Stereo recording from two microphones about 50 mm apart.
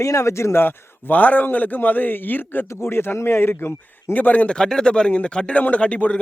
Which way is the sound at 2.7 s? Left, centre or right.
Left.